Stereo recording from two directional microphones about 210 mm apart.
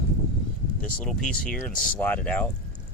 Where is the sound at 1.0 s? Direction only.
5° left (ahead or behind).